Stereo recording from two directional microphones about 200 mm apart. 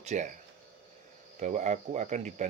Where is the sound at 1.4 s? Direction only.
35° right (ahead or behind).